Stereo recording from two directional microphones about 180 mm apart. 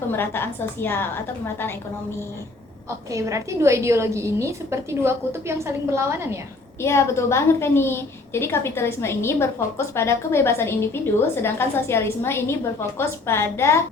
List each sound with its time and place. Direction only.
0.1 s a woman's voice: 10° left (ahead or behind)
3.1 s a woman's voice: 15° right (ahead or behind)
6.8 s a woman's voice: 15° left (ahead or behind)